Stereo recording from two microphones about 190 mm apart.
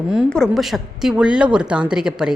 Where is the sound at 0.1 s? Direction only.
Centre (ahead or behind).